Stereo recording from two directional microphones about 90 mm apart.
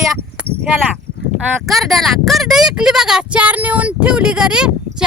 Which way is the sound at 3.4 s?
15° right (ahead or behind).